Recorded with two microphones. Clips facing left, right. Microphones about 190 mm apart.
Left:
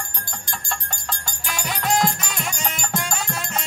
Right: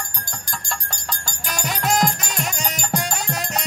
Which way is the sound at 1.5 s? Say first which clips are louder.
Right 1 dB; 40° right (ahead or behind).